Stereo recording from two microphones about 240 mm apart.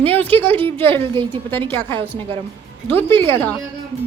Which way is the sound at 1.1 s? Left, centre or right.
Centre.